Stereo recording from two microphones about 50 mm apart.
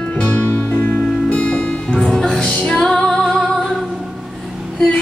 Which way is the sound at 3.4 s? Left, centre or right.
Centre.